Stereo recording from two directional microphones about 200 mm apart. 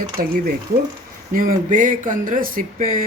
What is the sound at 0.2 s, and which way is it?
Speech, 45° right (ahead or behind).